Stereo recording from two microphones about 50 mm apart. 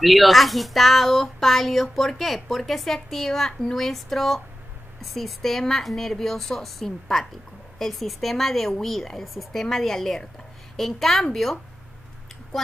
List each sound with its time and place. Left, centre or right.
0.0 s speech: centre